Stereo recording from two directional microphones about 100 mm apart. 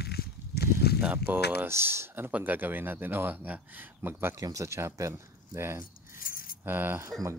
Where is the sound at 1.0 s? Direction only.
20° right (ahead or behind).